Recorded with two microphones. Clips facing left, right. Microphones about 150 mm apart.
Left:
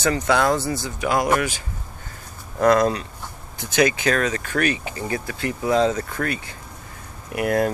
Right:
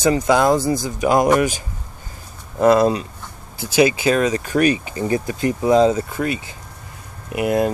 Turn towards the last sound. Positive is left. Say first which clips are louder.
# right 2 dB
turn(degrees=-20)  # may be behind; listen again after turning